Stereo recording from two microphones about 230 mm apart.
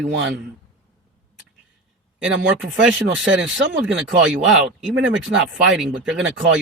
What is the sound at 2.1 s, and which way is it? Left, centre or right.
Speech, centre.